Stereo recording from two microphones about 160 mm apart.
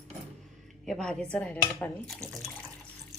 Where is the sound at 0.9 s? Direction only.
5° left (ahead or behind).